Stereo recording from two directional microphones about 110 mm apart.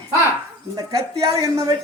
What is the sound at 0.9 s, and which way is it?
Speech, 35° right (ahead or behind).